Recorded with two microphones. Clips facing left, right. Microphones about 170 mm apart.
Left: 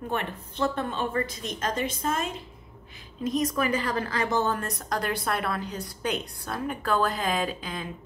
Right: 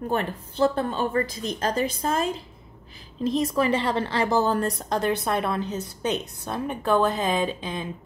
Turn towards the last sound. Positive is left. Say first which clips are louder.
# right 4 dB
turn(degrees=-20)  # may be behind; listen again after turning